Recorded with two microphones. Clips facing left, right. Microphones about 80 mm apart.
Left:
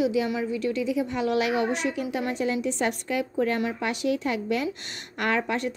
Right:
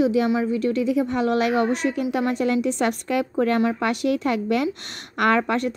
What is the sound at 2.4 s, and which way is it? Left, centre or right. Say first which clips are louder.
A woman's voice: right 4 dB; right.